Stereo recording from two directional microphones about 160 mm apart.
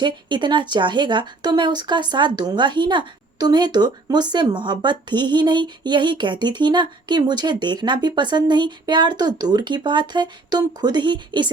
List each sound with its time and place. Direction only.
0.0 s speech: 30° right (ahead or behind)